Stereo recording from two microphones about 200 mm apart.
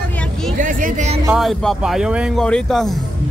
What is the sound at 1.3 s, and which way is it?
A man's voice, centre (ahead or behind).